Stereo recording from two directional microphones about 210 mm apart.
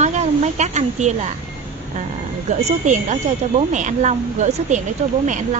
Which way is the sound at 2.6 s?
35° right (ahead or behind).